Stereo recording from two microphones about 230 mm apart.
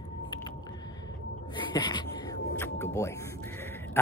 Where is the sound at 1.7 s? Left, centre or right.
Centre.